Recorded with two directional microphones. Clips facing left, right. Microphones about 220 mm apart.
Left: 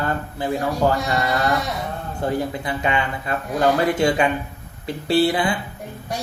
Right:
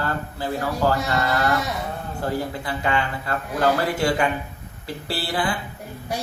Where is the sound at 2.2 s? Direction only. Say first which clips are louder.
Left 3 dB; 20° left (ahead or behind).